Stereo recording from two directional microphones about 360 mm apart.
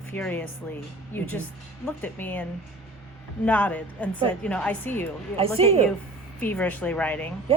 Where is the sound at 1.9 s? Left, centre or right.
Centre.